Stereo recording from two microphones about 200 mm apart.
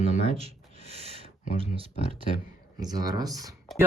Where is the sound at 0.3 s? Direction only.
30° right (ahead or behind).